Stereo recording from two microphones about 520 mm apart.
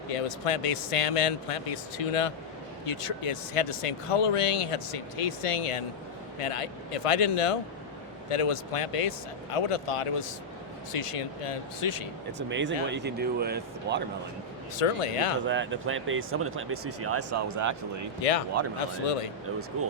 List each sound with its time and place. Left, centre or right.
0.1 s speech: left
2.8 s speech: left
12.4 s speech: right
14.8 s speech: left
15.4 s speech: right
18.2 s a man's voice: left